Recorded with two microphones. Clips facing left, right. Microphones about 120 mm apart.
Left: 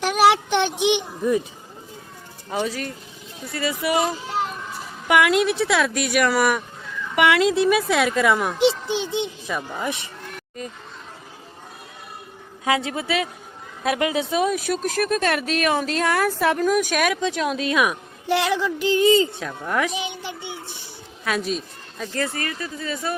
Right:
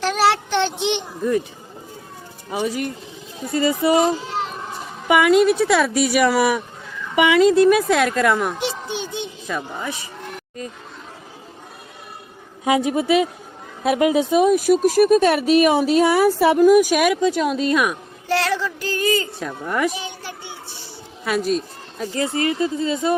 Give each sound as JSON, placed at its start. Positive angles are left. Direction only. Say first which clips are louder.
{"t": 0.0, "sound": "speech", "louder": "left 1 dB", "side_deg": 15}
{"t": 2.5, "sound": "speech", "louder": "right 2 dB", "side_deg": -15}
{"t": 3.9, "sound": "a child's voice", "louder": "right 4 dB", "side_deg": 0}
{"t": 8.6, "sound": "a sound", "louder": "left 6 dB", "side_deg": 25}
{"t": 12.7, "sound": "speech", "louder": "right 7 dB", "side_deg": -15}
{"t": 14.2, "sound": "speech", "louder": "right 6 dB", "side_deg": -5}
{"t": 18.3, "sound": "female singing", "louder": "even", "side_deg": 15}
{"t": 19.4, "sound": "speech", "louder": "right 2 dB", "side_deg": -5}
{"t": 20.0, "sound": "a sound", "louder": "left 2 dB", "side_deg": 20}
{"t": 21.2, "sound": "speech", "louder": "right 4 dB", "side_deg": 0}
{"t": 22.1, "sound": "speech", "louder": "right 6 dB", "side_deg": -20}